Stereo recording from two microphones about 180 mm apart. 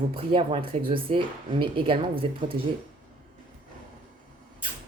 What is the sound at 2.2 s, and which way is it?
Speech, 30° right (ahead or behind).